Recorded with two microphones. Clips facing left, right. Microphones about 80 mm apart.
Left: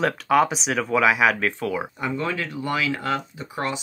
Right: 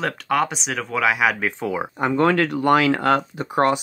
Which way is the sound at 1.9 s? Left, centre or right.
Right.